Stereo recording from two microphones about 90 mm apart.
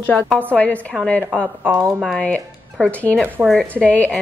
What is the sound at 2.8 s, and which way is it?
Speech, centre (ahead or behind).